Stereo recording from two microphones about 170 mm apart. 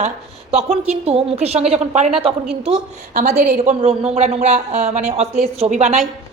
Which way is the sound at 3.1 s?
45° right (ahead or behind).